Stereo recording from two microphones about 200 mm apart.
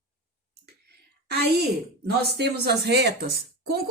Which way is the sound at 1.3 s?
55° right (ahead or behind).